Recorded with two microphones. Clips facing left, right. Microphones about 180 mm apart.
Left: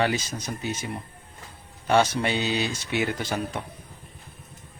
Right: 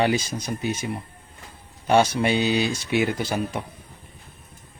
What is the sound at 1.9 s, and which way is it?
Speech, 15° right (ahead or behind).